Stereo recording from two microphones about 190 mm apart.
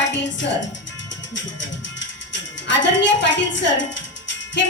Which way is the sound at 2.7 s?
70° left (ahead or behind).